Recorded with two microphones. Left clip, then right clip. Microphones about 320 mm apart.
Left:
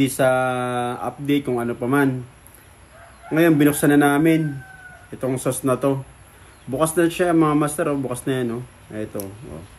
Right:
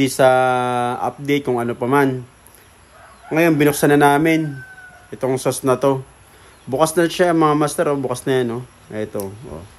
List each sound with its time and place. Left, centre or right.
0.0 s speech: right
3.3 s speech: centre